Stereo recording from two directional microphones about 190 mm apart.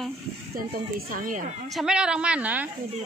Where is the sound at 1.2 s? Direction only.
45° right (ahead or behind).